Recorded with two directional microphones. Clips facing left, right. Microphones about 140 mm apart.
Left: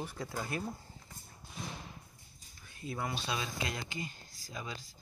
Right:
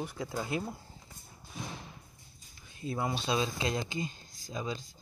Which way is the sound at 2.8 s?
25° right (ahead or behind).